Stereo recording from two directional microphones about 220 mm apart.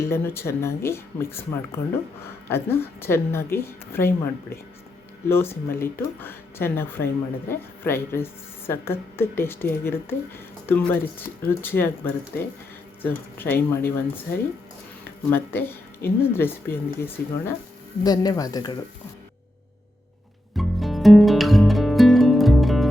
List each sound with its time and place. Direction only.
0.0 s speech: 10° left (ahead or behind)
15.3 s speech: 10° left (ahead or behind)
20.6 s music: centre (ahead or behind)